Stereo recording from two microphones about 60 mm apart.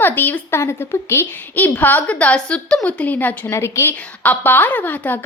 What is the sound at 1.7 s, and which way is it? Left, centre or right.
A woman's voice, left.